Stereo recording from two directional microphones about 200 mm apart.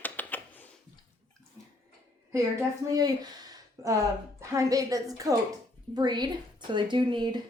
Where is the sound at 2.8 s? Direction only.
20° right (ahead or behind).